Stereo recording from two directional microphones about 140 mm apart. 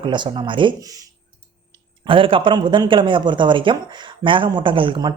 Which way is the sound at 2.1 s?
40° right (ahead or behind).